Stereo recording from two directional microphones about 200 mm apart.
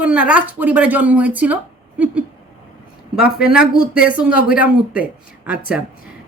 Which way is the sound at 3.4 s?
5° right (ahead or behind).